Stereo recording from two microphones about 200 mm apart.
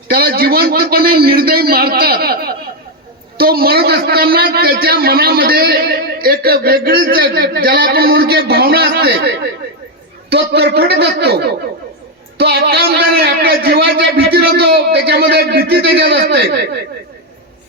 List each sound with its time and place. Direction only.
0.1 s a man's voice: 50° right (ahead or behind)